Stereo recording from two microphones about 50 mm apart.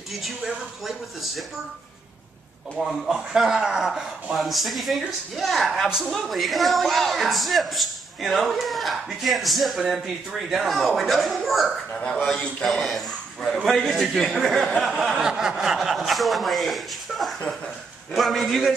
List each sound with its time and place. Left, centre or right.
2.8 s a man's voice: centre
3.9 s a man's voice: centre
12.4 s a man's voice: centre
12.6 s a man's voice: centre